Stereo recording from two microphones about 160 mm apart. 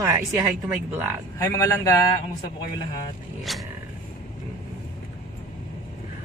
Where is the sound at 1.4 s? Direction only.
20° left (ahead or behind).